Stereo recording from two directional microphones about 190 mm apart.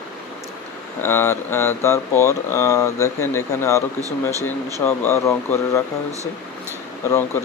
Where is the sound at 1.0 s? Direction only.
10° left (ahead or behind).